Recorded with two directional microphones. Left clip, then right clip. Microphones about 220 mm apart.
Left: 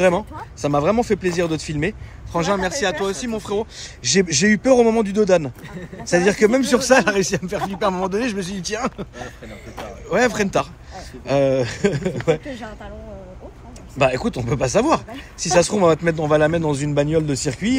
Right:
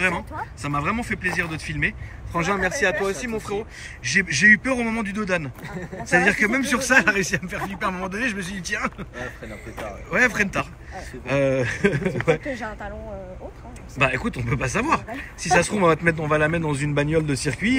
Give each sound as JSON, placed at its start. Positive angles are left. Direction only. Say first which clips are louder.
{"t": 0.6, "sound": "a woman's voice", "louder": "left 8 dB", "side_deg": 15}
{"t": 13.9, "sound": "speech", "louder": "left 4 dB", "side_deg": 10}